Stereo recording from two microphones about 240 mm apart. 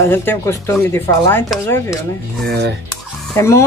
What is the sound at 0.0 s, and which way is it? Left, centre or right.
Dishes, centre.